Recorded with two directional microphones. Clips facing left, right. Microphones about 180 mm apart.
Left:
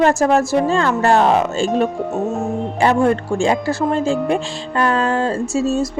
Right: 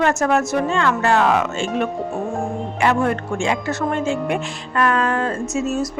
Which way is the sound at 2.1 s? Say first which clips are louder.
Left 3 dB; 20° left (ahead or behind).